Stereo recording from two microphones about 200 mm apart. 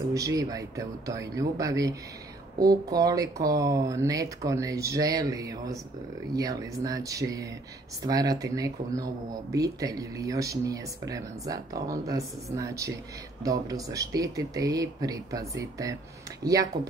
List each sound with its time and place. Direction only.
0.1 s speech: 15° right (ahead or behind)